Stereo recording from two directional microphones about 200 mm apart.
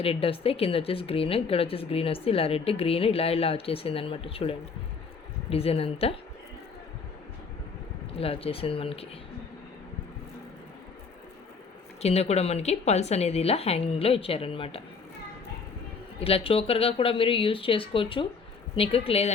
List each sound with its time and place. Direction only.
0.0 s a woman's voice: 30° left (ahead or behind)
8.2 s a woman's voice: 30° left (ahead or behind)
12.0 s a woman's voice: 30° left (ahead or behind)
16.2 s a woman's voice: 30° left (ahead or behind)